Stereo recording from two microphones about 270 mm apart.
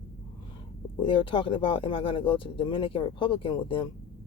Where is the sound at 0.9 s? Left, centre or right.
Centre.